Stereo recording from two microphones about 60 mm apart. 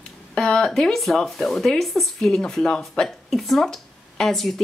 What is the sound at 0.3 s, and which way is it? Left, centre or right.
Speech, centre.